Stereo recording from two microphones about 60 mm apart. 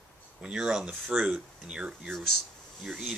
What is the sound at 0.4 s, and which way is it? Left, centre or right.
Speech, centre.